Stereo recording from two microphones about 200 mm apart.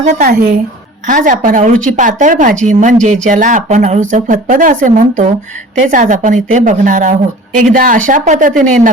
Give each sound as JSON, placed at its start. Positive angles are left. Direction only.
{"t": 0.2, "sound": "a woman's voice", "side_deg": -50}